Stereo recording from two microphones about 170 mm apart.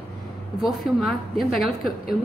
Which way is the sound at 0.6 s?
Centre (ahead or behind).